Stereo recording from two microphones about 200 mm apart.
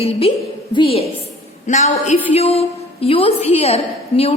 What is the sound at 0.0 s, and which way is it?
A woman's voice, 30° left (ahead or behind).